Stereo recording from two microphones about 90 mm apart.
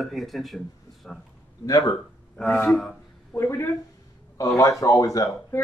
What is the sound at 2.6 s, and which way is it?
Speech, 5° left (ahead or behind).